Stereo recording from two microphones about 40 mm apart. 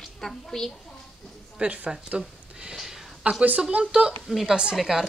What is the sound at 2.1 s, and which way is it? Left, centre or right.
Speech, right.